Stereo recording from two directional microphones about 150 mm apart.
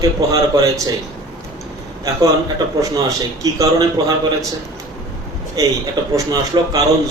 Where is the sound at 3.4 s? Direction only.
25° right (ahead or behind).